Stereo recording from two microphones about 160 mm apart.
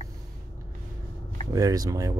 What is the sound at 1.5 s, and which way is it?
Speech, 25° right (ahead or behind).